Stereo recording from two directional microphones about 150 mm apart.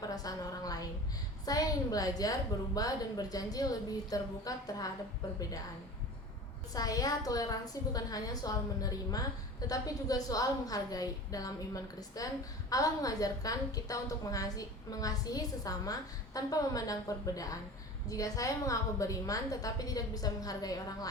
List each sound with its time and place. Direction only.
0.0 s a woman's voice: 25° left (ahead or behind)
6.7 s a woman's voice: 25° left (ahead or behind)